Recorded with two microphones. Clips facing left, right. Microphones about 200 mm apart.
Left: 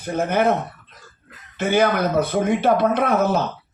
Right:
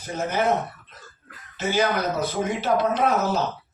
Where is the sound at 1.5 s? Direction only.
55° left (ahead or behind).